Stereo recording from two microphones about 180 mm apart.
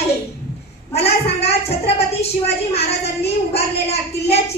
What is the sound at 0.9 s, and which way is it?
A woman's voice, 35° left (ahead or behind).